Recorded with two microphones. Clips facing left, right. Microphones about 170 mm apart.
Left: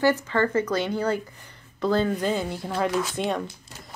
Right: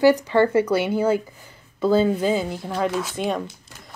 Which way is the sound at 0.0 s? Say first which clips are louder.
Right 6 dB; 15° right (ahead or behind).